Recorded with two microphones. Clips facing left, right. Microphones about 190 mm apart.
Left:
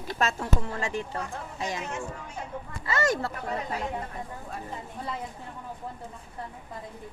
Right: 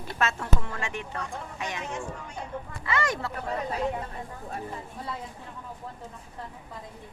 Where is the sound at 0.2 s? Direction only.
35° left (ahead or behind).